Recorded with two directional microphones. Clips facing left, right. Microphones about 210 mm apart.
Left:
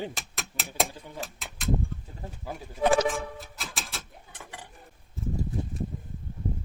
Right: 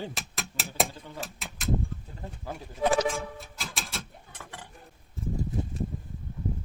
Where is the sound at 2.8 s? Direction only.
65° left (ahead or behind).